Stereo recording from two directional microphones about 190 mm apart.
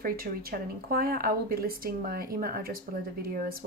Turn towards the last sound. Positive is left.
turn(degrees=-50)  # may be behind; listen again after turning